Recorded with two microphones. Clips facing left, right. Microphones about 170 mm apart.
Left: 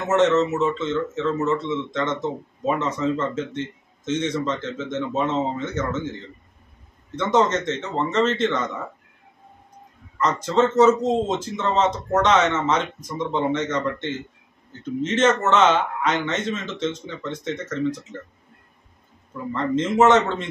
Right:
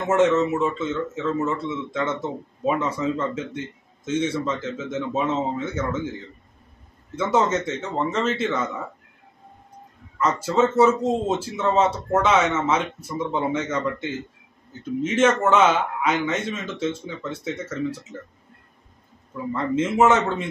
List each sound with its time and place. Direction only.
0.0 s speech: 10° right (ahead or behind)
7.2 s speech: 10° right (ahead or behind)
10.1 s speech: 10° right (ahead or behind)
19.5 s speech: 10° right (ahead or behind)